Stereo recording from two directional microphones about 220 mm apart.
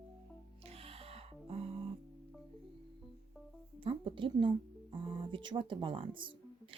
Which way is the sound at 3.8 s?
25° right (ahead or behind).